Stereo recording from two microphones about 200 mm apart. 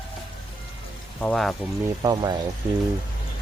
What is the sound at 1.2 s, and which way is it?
Speech, centre (ahead or behind).